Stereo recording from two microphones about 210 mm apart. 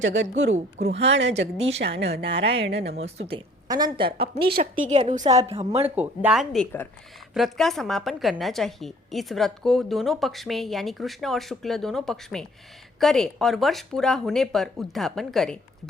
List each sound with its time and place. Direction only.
0.0 s speech: 60° right (ahead or behind)
3.0 s a woman's voice: 30° right (ahead or behind)
4.6 s a woman's voice: 35° right (ahead or behind)
5.7 s a woman's voice: 10° right (ahead or behind)